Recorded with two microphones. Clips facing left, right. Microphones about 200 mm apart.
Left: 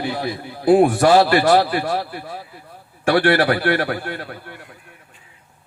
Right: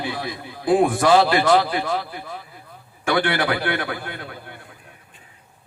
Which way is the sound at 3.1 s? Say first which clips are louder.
Left 5 dB; 40° left (ahead or behind).